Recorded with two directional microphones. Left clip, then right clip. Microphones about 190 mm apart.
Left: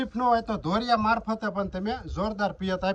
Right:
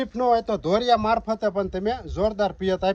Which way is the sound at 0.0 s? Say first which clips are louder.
Right 3 dB; 55° right (ahead or behind).